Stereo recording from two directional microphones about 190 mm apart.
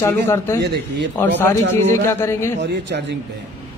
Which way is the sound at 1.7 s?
10° left (ahead or behind).